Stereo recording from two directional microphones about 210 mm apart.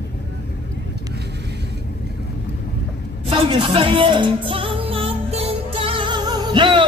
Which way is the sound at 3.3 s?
25° right (ahead or behind).